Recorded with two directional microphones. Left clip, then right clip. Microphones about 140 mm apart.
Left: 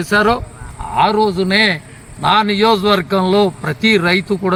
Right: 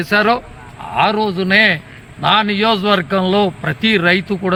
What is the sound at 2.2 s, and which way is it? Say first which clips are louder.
A man's voice: left 1 dB; 50° right (ahead or behind).